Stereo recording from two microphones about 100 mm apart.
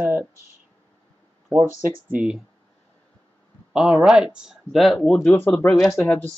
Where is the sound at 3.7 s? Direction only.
5° right (ahead or behind).